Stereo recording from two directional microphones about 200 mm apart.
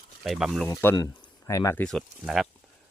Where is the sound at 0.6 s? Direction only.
15° left (ahead or behind).